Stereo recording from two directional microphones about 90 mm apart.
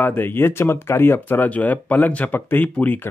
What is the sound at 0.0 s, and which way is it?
A man's voice, 20° left (ahead or behind).